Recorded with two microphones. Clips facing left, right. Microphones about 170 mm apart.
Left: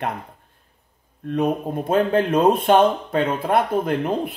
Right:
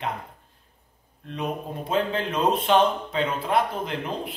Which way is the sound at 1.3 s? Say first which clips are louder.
Left 9 dB; 50° left (ahead or behind).